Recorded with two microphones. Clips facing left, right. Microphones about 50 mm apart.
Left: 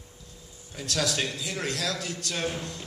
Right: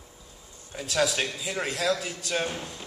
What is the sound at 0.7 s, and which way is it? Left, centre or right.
A man's voice, centre.